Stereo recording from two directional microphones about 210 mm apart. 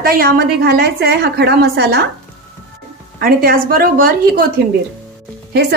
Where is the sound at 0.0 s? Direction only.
45° right (ahead or behind).